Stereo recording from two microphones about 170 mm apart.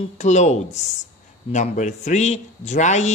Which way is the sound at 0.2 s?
45° left (ahead or behind).